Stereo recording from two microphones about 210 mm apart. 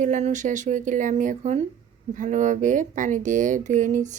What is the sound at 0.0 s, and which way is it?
Speech, 35° right (ahead or behind).